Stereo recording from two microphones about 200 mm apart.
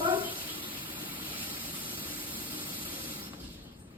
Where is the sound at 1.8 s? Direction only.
25° right (ahead or behind).